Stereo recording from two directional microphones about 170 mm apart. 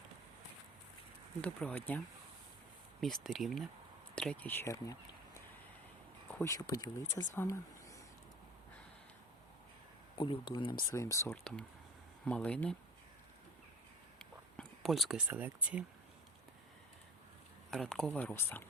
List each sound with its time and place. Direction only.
1.4 s speech: 10° left (ahead or behind)
3.0 s speech: centre (ahead or behind); by 5.4 s 20° left (ahead or behind)
6.4 s speech: 20° left (ahead or behind)
10.2 s speech: 30° left (ahead or behind)
12.2 s speech: 5° left (ahead or behind)
14.2 s whispering: 5° left (ahead or behind)
15.3 s speech: 10° right (ahead or behind)
17.7 s speech: centre (ahead or behind)